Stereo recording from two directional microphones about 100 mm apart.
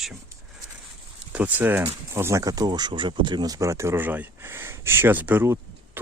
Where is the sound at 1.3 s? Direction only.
15° right (ahead or behind).